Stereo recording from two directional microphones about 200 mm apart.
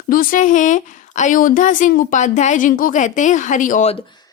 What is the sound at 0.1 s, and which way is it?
A woman's voice, 45° left (ahead or behind).